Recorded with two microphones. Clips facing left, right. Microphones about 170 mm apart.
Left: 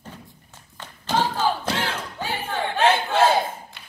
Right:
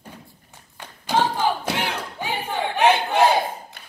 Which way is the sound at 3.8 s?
45° right (ahead or behind).